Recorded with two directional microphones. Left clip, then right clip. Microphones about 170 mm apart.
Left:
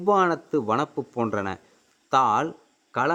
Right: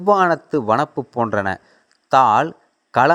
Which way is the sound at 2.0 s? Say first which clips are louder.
Right 7 dB; 25° right (ahead or behind).